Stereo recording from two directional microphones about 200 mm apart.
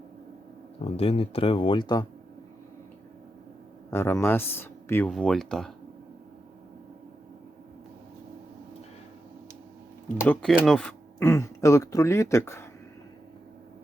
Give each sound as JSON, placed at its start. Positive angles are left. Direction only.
{"t": 0.8, "sound": "speech", "side_deg": 30}
{"t": 3.9, "sound": "speech", "side_deg": 10}
{"t": 10.2, "sound": "speech", "side_deg": 5}